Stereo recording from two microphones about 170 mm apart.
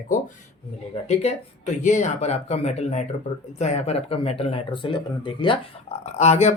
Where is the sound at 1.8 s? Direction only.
45° left (ahead or behind); by 5.6 s 30° left (ahead or behind).